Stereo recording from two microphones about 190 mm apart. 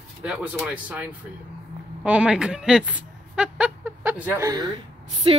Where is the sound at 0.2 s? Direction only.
5° right (ahead or behind).